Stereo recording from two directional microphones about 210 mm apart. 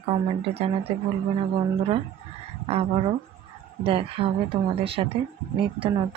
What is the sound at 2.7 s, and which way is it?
Speech, 25° right (ahead or behind).